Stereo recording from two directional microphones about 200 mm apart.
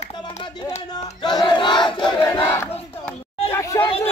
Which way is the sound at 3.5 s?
15° left (ahead or behind).